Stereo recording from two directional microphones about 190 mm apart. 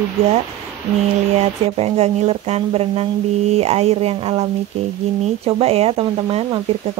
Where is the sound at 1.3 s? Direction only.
35° right (ahead or behind).